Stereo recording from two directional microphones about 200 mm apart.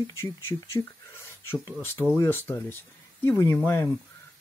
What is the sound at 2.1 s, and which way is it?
Speech, 15° left (ahead or behind).